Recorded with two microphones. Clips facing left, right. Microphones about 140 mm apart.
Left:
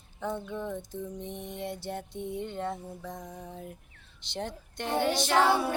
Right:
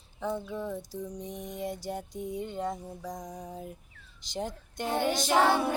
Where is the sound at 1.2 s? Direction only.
40° right (ahead or behind).